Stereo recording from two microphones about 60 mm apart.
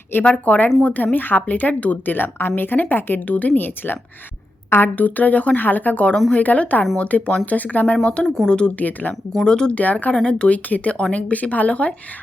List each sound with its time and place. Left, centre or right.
0.3 s a woman's voice: left
8.8 s speech: left
9.3 s speech: centre
9.8 s speech: left